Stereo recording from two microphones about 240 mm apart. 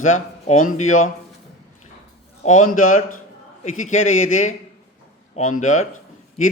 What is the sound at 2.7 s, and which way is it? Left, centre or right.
Speech, left.